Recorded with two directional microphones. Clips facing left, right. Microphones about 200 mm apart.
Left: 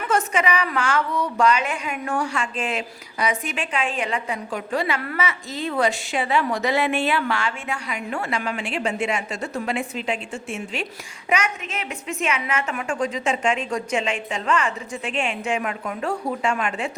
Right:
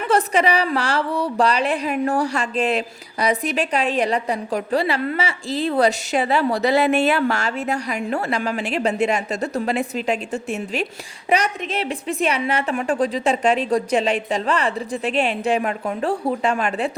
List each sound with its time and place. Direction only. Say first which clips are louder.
0.1 s speech: right 4 dB; 35° right (ahead or behind)